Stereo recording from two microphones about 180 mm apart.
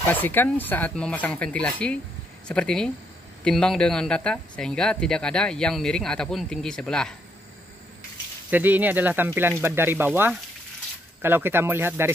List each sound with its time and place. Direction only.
0.1 s speech: 10° left (ahead or behind)
8.5 s speech: 10° right (ahead or behind)